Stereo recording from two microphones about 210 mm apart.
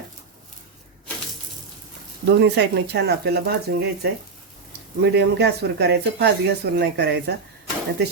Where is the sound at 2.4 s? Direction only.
55° right (ahead or behind).